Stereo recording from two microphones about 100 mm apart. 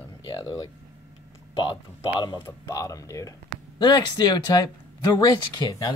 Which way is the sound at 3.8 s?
50° left (ahead or behind).